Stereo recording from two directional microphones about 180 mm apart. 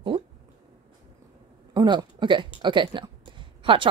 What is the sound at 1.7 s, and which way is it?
Speech, 25° right (ahead or behind).